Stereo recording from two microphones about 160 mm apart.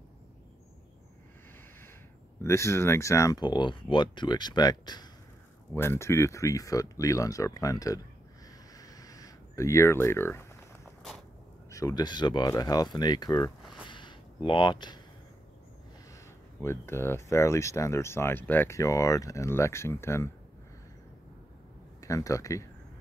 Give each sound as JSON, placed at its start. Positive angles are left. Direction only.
{"t": 2.4, "sound": "speech", "side_deg": 15}
{"t": 5.7, "sound": "speech", "side_deg": 15}
{"t": 8.7, "sound": "a sound", "side_deg": 20}
{"t": 11.7, "sound": "speech", "side_deg": 25}
{"t": 13.8, "sound": "a sound", "side_deg": 30}
{"t": 16.6, "sound": "speech", "side_deg": 15}
{"t": 22.0, "sound": "speech", "side_deg": 20}